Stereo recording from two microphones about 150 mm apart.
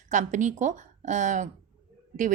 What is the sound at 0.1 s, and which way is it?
A woman's voice, 55° right (ahead or behind).